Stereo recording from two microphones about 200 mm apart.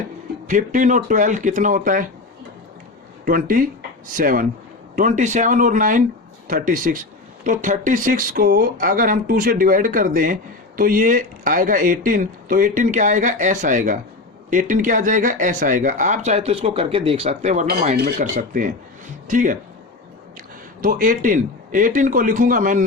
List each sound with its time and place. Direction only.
0.4 s speech: 40° right (ahead or behind)
3.2 s speech: 45° right (ahead or behind)
20.8 s speech: 45° right (ahead or behind)